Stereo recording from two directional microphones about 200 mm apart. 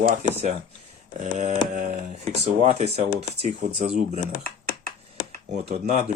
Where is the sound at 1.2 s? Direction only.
35° right (ahead or behind).